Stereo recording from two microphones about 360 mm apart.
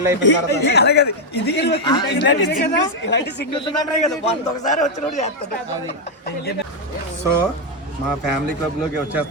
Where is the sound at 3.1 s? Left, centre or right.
Left.